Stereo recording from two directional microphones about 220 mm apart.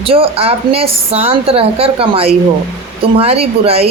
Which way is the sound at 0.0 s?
25° right (ahead or behind).